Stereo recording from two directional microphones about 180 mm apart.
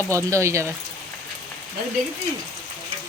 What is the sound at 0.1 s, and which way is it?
Speech, 15° right (ahead or behind).